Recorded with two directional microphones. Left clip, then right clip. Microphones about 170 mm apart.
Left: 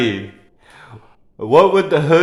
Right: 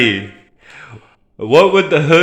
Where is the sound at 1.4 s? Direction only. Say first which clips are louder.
Right 2 dB; 15° right (ahead or behind).